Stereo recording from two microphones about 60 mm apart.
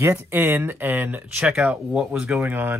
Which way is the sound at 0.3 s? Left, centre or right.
Right.